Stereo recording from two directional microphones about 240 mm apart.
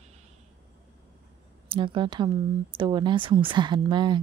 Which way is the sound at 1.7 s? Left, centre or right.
Right.